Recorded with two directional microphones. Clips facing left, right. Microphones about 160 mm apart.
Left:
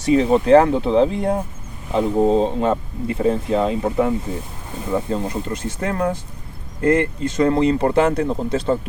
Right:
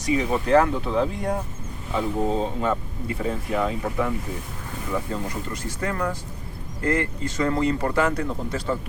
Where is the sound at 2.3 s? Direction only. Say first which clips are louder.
Left 7 dB; 25° left (ahead or behind).